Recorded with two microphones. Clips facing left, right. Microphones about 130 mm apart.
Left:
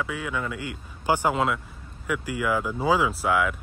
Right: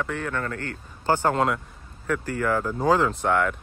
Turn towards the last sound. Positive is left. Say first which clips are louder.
# right 1 dB
turn(degrees=5)  # may be behind; listen again after turning